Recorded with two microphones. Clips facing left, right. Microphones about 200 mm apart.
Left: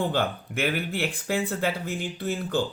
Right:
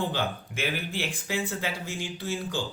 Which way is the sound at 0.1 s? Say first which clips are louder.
Left 4 dB; 55° left (ahead or behind).